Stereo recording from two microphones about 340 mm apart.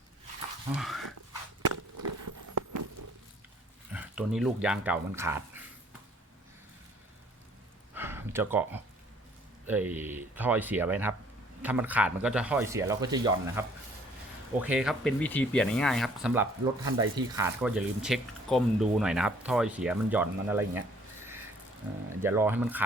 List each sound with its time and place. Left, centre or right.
0.8 s dog: centre
1.6 s walk: right
3.9 s speech: centre
7.9 s a sound: centre
9.6 s speech: centre
22.2 s speech: centre